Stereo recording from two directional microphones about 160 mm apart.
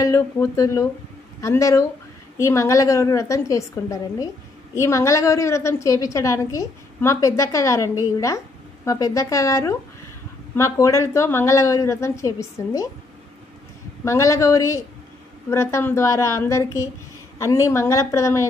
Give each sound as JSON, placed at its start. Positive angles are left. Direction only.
{"t": 0.0, "sound": "a woman's voice", "side_deg": 20}
{"t": 14.0, "sound": "a woman's voice", "side_deg": 20}